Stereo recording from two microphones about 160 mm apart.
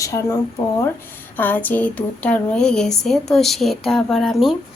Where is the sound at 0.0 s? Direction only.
20° left (ahead or behind).